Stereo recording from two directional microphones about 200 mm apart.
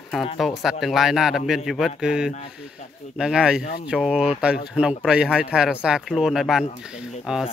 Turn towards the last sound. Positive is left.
turn(degrees=0)  # may be behind; listen again after turning